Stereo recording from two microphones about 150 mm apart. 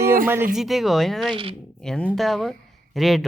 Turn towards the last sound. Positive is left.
turn(degrees=0)  # may be behind; listen again after turning